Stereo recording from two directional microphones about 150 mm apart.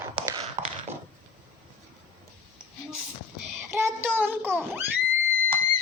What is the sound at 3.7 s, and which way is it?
Child singing, 15° right (ahead or behind).